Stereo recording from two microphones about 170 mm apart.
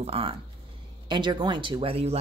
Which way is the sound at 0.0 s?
35° right (ahead or behind).